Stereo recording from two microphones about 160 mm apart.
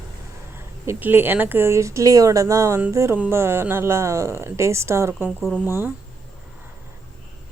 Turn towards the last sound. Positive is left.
turn(degrees=-15)  # may be behind; listen again after turning